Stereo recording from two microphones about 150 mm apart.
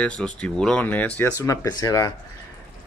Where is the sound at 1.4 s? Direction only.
20° left (ahead or behind).